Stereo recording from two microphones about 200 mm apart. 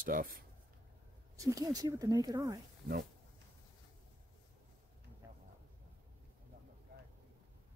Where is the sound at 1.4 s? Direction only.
15° right (ahead or behind).